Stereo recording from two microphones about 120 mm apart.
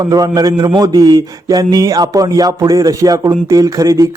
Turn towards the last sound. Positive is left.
turn(degrees=-30)  # may be behind; listen again after turning